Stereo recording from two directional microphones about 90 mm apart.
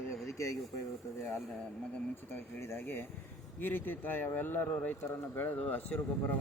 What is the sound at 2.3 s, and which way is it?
Speech, 25° left (ahead or behind).